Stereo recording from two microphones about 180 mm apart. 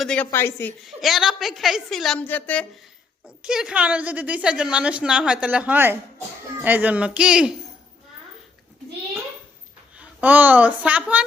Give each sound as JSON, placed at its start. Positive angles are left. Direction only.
{"t": 0.0, "sound": "speech", "side_deg": 5}
{"t": 0.9, "sound": "a woman's voice", "side_deg": 0}
{"t": 3.2, "sound": "a woman's voice", "side_deg": -5}
{"t": 9.9, "sound": "a woman's voice", "side_deg": -10}